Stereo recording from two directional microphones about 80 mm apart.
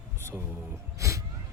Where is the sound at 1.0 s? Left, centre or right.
Right.